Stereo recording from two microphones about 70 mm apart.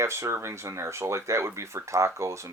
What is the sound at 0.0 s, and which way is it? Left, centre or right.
Speech, right.